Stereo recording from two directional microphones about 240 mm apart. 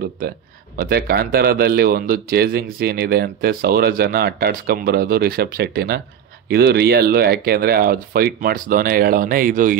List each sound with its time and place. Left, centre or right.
0.7 s speech: right